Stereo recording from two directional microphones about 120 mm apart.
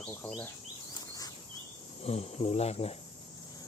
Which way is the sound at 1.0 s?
30° left (ahead or behind).